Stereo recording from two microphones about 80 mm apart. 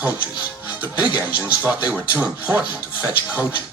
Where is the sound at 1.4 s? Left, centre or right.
Right.